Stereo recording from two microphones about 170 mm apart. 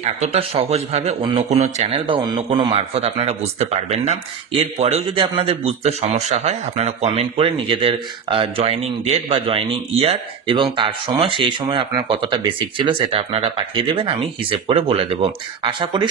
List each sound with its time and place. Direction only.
0.0 s a man's voice: 40° right (ahead or behind)